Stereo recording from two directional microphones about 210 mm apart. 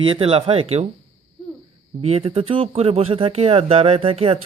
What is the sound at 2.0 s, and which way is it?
Speech, 30° right (ahead or behind).